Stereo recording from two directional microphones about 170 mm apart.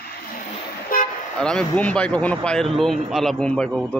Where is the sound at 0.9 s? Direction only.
60° left (ahead or behind).